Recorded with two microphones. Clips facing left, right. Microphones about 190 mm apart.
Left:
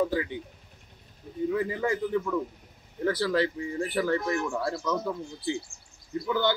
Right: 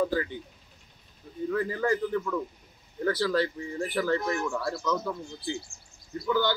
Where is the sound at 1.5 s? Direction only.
15° left (ahead or behind).